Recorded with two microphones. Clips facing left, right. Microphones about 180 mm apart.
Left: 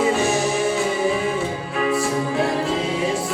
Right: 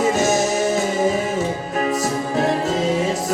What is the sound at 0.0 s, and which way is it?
Music, 40° right (ahead or behind).